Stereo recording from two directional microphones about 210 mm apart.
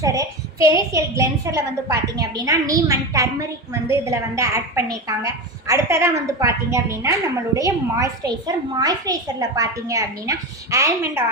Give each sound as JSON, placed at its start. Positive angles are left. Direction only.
{"t": 0.0, "sound": "a woman's voice", "side_deg": -15}